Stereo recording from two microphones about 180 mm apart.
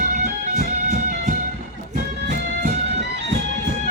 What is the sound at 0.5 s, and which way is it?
Music, 45° right (ahead or behind).